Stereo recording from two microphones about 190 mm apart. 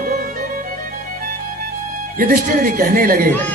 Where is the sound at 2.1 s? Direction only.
50° right (ahead or behind).